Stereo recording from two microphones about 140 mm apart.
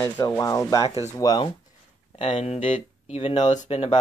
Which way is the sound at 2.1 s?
45° left (ahead or behind).